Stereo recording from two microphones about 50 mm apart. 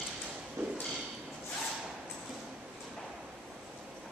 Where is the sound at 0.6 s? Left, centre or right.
Right.